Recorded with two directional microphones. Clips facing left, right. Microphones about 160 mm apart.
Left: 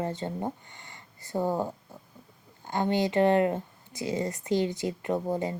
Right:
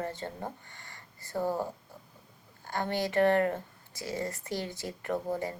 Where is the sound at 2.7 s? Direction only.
20° left (ahead or behind).